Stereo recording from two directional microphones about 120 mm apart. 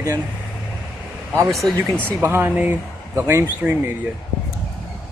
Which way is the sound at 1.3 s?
25° right (ahead or behind).